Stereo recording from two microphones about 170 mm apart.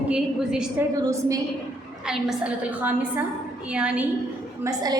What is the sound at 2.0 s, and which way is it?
A woman's voice, 5° right (ahead or behind).